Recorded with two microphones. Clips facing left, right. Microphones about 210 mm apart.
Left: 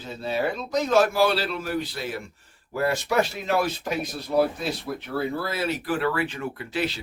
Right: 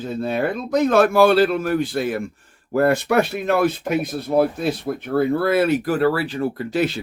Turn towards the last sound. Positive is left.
turn(degrees=-45)  # may be behind; listen again after turning